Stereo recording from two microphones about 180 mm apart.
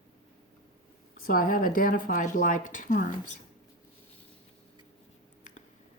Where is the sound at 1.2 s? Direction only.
50° left (ahead or behind).